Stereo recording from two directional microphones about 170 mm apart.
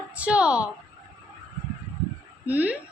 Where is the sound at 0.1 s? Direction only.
5° right (ahead or behind).